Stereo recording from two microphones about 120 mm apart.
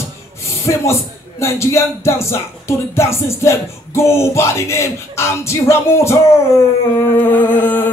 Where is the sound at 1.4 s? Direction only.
20° left (ahead or behind).